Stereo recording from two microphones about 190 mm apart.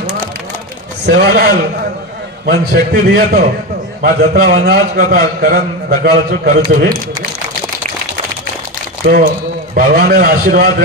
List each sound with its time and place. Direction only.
1.0 s a man's voice: 55° right (ahead or behind)
9.0 s a man's voice: 60° right (ahead or behind)
9.8 s a man's voice: 45° right (ahead or behind)